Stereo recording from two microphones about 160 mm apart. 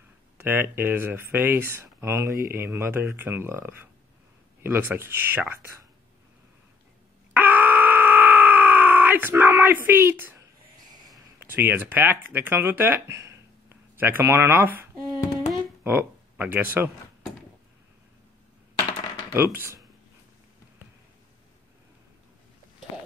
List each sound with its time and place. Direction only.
0.4 s speech: 15° right (ahead or behind)
7.3 s groan: 10° right (ahead or behind)
11.3 s speech: 15° right (ahead or behind)
19.3 s speech: 15° right (ahead or behind)